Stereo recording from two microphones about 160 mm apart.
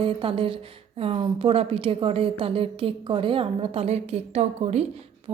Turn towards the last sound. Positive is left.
turn(degrees=-40)  # may be behind; listen again after turning